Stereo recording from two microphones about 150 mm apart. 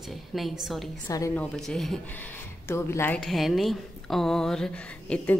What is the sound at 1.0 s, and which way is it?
Speech, 20° left (ahead or behind).